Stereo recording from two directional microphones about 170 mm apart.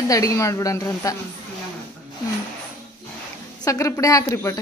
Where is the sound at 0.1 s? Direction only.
20° left (ahead or behind).